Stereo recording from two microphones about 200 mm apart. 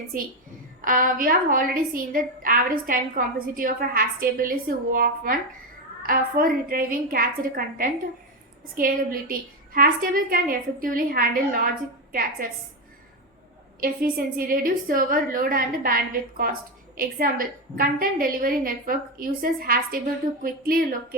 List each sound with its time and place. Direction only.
0.1 s a woman's voice: 45° right (ahead or behind)
13.7 s a woman's voice: 45° right (ahead or behind)